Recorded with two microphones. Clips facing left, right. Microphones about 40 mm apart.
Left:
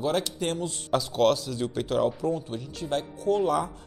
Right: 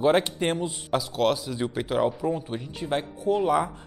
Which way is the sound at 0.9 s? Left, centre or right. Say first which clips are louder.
Left 2 dB; centre.